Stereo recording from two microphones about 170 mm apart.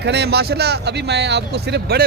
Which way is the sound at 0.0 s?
80° right.